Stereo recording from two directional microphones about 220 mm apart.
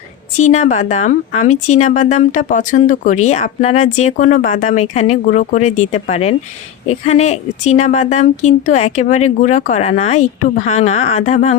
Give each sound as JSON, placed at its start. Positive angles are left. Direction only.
{"t": 0.3, "sound": "speech", "side_deg": 35}